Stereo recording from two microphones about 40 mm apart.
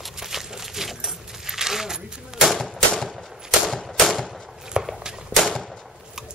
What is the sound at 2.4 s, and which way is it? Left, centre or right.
Typewriter, centre.